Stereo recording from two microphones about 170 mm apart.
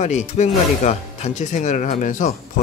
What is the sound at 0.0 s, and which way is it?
Speech, 45° left (ahead or behind).